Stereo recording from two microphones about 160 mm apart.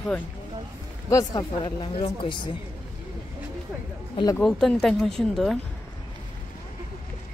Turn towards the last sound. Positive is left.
turn(degrees=0)  # may be behind; listen again after turning